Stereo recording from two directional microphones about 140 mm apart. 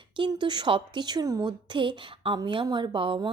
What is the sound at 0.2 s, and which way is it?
A woman's voice, 35° right (ahead or behind).